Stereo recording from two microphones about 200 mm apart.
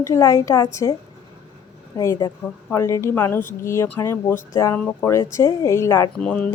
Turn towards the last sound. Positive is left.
turn(degrees=5)  # may be behind; listen again after turning